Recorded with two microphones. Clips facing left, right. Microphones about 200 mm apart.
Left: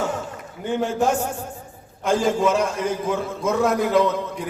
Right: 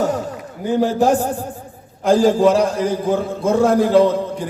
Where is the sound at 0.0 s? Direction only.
40° right (ahead or behind).